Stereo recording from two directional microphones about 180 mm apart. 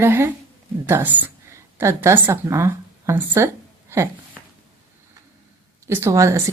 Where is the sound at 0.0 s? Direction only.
15° right (ahead or behind).